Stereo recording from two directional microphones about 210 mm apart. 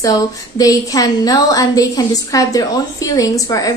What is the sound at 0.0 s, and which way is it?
A woman's voice, 15° left (ahead or behind).